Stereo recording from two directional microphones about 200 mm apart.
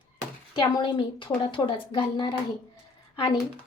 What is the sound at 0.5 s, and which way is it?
Speech, 25° left (ahead or behind).